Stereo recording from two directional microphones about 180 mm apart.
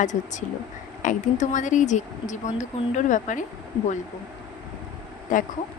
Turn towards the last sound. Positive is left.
turn(degrees=45)  # may be behind; listen again after turning